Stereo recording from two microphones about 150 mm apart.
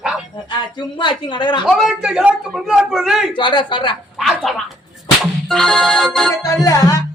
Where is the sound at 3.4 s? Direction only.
30° left (ahead or behind).